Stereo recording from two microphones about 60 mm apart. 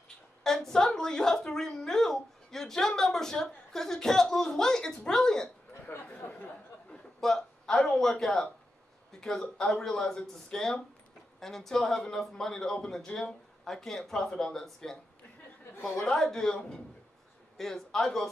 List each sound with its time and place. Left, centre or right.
0.4 s a woman's voice: centre
5.9 s speech: left
6.9 s a man's voice: centre
17.6 s a man's voice: centre